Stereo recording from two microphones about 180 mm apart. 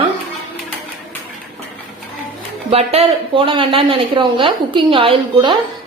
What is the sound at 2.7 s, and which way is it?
Speech, 35° right (ahead or behind).